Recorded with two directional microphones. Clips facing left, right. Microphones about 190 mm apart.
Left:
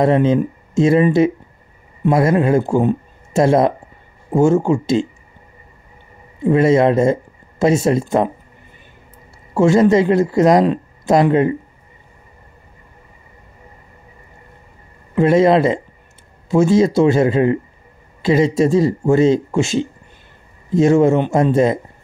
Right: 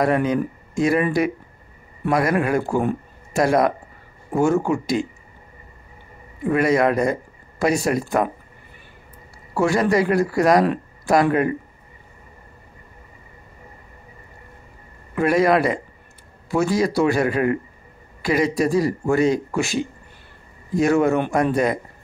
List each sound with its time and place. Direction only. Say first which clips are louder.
0.0 s speech: left 5 dB; 25° left (ahead or behind)
6.4 s speech: left 5 dB; 25° left (ahead or behind)
9.5 s speech: left 7 dB; 25° left (ahead or behind)
15.1 s speech: left 5 dB; 25° left (ahead or behind)